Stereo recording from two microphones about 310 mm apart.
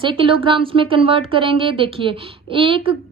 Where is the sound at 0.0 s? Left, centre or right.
Centre.